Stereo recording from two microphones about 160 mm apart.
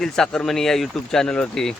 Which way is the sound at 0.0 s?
5° left (ahead or behind).